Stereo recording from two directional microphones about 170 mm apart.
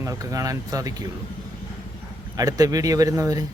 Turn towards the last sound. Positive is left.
turn(degrees=-20)  # may be behind; listen again after turning